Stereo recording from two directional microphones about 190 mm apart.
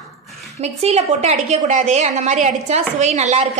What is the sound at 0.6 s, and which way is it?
A woman's voice, 35° right (ahead or behind).